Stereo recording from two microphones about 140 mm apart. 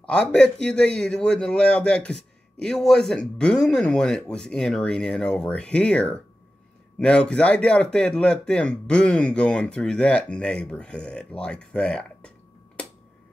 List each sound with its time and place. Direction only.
0.0 s a man's voice: 5° left (ahead or behind)